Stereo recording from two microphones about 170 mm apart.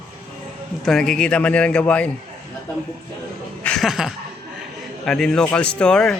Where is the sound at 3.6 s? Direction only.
5° left (ahead or behind).